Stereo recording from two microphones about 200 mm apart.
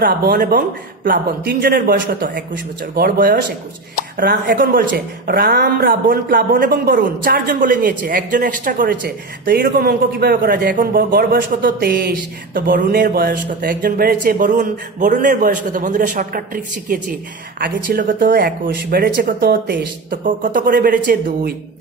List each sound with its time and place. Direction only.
0.0 s speech: 45° right (ahead or behind)